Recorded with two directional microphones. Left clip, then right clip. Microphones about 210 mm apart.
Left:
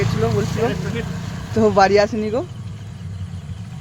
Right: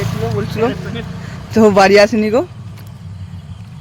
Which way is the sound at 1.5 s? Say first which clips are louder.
Right 6 dB; 35° right (ahead or behind).